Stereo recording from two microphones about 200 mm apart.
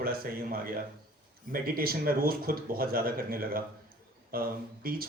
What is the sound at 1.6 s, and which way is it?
Speech, 45° right (ahead or behind).